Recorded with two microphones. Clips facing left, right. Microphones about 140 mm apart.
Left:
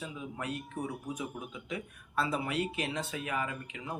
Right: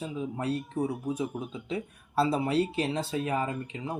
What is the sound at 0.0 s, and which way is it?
Speech, 35° right (ahead or behind).